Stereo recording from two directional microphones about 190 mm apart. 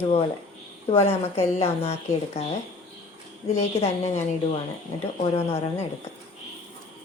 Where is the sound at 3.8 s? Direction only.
35° left (ahead or behind).